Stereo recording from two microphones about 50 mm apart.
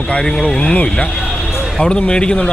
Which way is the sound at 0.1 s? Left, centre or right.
Centre.